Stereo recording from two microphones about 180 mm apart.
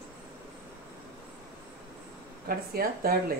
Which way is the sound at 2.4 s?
55° right (ahead or behind).